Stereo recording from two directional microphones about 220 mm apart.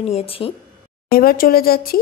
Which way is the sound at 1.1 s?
40° left (ahead or behind).